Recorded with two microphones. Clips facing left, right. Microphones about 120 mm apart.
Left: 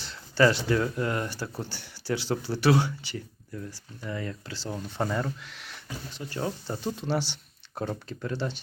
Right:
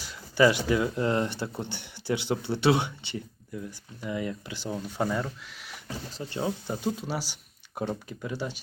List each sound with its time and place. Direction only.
0.0 s speech: 10° right (ahead or behind)
1.0 s speech: 25° right (ahead or behind); by 5.8 s 5° right (ahead or behind)
6.3 s speech: 15° right (ahead or behind)